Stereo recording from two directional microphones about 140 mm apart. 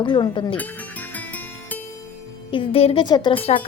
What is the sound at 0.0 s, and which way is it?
Speech, 30° left (ahead or behind).